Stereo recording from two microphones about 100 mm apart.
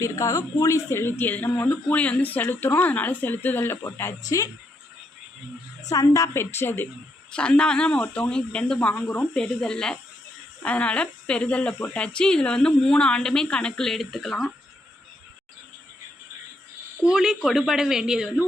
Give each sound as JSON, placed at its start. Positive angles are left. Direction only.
{"t": 0.0, "sound": "a woman's voice", "side_deg": 35}
{"t": 5.9, "sound": "a woman's voice", "side_deg": 35}
{"t": 7.3, "sound": "speech", "side_deg": 10}
{"t": 17.0, "sound": "a woman's voice", "side_deg": -5}